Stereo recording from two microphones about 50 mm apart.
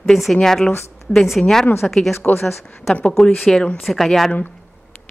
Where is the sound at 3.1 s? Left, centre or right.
Centre.